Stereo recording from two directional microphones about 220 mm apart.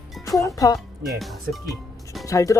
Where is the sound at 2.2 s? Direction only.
15° left (ahead or behind).